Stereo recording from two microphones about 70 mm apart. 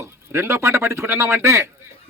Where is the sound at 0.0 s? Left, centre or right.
Right.